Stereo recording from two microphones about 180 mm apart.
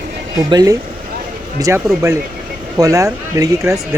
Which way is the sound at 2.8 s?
20° right (ahead or behind).